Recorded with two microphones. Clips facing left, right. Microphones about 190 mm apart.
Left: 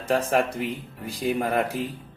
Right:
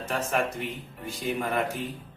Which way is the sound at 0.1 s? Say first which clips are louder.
Left 6 dB; 35° left (ahead or behind).